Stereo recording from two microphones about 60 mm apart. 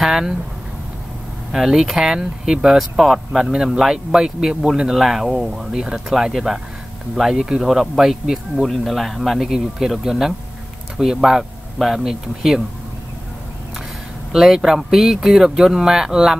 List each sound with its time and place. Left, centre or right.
0.0 s speech: centre
1.5 s speech: centre
14.3 s speech: centre